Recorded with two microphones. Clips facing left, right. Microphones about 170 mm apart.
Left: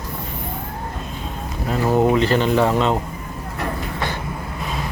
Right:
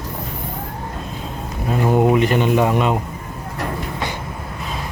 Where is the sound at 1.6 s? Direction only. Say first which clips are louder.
Right 1 dB; 15° right (ahead or behind).